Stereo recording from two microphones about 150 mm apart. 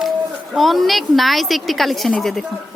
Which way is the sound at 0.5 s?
Centre (ahead or behind).